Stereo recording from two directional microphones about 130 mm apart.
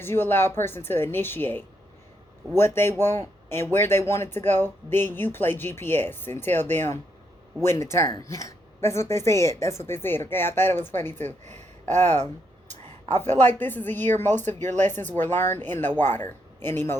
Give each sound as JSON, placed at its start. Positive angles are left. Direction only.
{"t": 0.0, "sound": "speech", "side_deg": 15}
{"t": 11.4, "sound": "speech", "side_deg": -60}
{"t": 12.6, "sound": "a sound", "side_deg": 15}
{"t": 13.4, "sound": "speech", "side_deg": 15}